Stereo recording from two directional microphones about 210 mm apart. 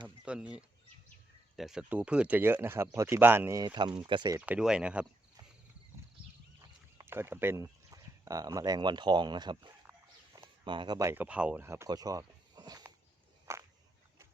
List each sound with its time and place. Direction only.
0.3 s speech: 5° right (ahead or behind); by 4.4 s 20° right (ahead or behind)
4.4 s speech: 5° right (ahead or behind)
7.0 s speech: 10° right (ahead or behind)